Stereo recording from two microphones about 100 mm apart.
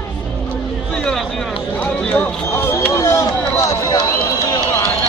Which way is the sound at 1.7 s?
15° left (ahead or behind).